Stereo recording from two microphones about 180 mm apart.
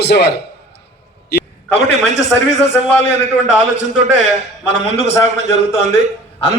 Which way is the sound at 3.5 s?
40° left (ahead or behind).